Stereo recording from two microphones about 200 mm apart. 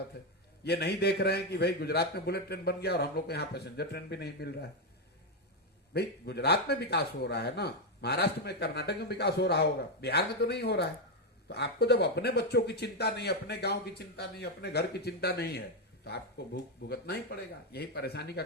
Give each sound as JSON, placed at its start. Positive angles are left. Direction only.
{"t": 0.1, "sound": "a man's voice", "side_deg": 55}
{"t": 5.9, "sound": "a man's voice", "side_deg": 55}